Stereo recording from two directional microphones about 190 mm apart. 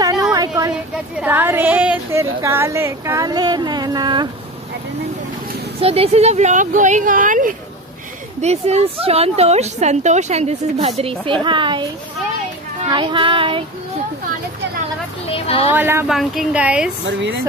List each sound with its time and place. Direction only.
0.0 s a sound: 20° right (ahead or behind)
0.9 s speech: 5° right (ahead or behind); by 4.3 s 25° right (ahead or behind)
5.8 s a woman's voice: 30° right (ahead or behind)
11.4 s child singing: 25° right (ahead or behind)
12.8 s child singing: 25° right (ahead or behind)
15.2 s speech: 30° left (ahead or behind)
15.7 s a woman's voice: 10° right (ahead or behind)